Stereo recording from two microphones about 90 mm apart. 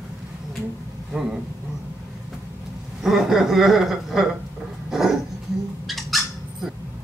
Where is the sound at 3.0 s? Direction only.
Centre (ahead or behind).